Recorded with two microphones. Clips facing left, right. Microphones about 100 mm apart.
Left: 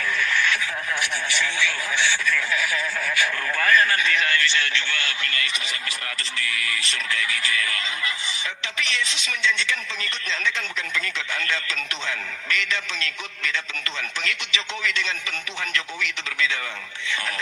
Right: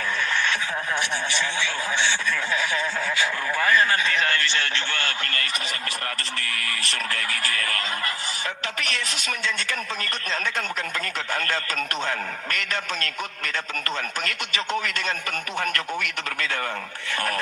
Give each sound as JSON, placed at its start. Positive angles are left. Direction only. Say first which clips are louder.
{"t": 0.2, "sound": "radio", "louder": "left 2 dB", "side_deg": -30}
{"t": 1.3, "sound": "speech", "louder": "left 1 dB", "side_deg": -25}